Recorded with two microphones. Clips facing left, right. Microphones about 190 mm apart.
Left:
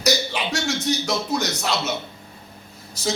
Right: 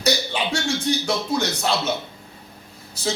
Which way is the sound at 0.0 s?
30° right (ahead or behind).